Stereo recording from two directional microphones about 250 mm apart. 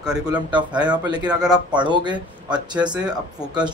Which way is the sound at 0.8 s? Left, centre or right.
Centre.